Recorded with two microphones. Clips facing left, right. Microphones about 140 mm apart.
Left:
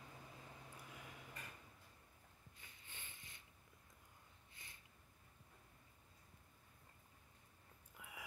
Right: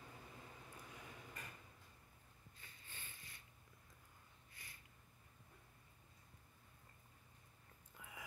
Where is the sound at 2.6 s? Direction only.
15° left (ahead or behind).